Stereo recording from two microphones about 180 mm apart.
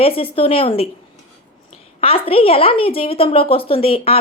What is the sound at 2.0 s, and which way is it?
Speech, 30° left (ahead or behind).